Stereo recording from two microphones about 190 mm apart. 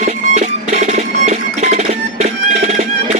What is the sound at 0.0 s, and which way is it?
Music, 40° right (ahead or behind).